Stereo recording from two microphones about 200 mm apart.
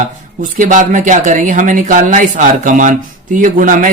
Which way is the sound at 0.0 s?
40° right (ahead or behind).